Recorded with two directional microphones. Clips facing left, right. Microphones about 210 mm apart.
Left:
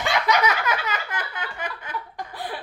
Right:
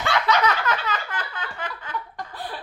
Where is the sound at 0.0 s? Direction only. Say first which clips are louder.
Even; 15° left (ahead or behind).